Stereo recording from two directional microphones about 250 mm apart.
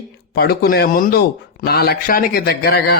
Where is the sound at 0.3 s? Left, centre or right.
Left.